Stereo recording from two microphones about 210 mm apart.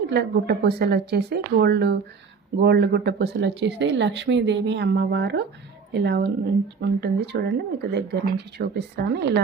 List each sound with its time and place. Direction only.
0.1 s speech: 50° right (ahead or behind)